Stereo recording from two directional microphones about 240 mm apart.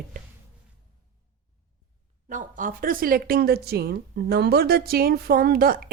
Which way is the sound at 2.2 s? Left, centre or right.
Right.